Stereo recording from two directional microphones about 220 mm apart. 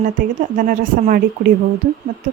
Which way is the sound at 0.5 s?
40° right (ahead or behind).